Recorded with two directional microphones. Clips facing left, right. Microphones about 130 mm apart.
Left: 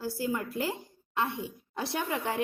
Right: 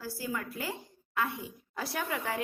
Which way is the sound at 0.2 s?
25° left (ahead or behind).